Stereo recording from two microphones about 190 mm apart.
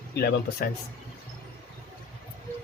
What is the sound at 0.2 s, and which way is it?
Speech, 55° left (ahead or behind).